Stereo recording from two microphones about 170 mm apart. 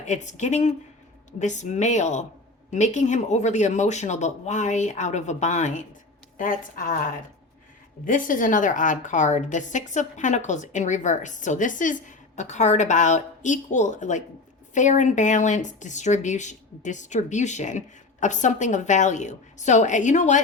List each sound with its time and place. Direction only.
0.0 s a woman's voice: 45° left (ahead or behind)
8.0 s a woman's voice: 55° left (ahead or behind)